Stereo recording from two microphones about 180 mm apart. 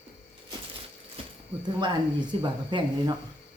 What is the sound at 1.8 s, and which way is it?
Speech, 25° right (ahead or behind).